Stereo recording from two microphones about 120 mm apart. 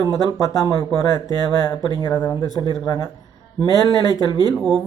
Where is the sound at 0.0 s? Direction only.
30° left (ahead or behind).